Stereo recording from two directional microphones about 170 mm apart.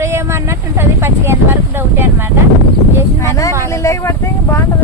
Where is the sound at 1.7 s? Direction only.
15° right (ahead or behind).